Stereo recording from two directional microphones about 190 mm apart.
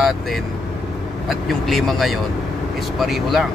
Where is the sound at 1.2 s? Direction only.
Centre (ahead or behind).